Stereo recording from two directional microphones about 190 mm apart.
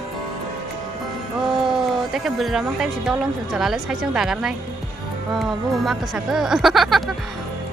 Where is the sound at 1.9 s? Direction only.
Centre (ahead or behind).